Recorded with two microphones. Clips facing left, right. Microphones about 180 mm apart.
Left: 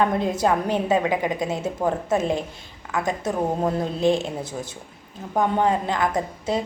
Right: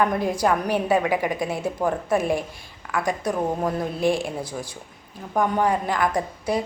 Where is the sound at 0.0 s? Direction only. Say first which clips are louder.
Even; 25° left (ahead or behind).